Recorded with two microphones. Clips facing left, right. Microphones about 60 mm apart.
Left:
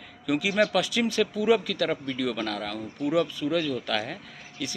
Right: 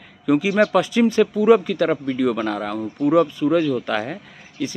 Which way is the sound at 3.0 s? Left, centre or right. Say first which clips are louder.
Right 8 dB; right.